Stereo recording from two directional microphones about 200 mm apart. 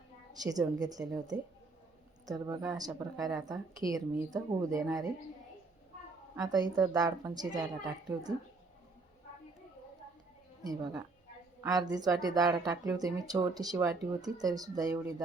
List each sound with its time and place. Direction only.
0.3 s a woman's voice: 20° right (ahead or behind)
6.4 s a woman's voice: 20° right (ahead or behind)
10.6 s a woman's voice: 20° right (ahead or behind)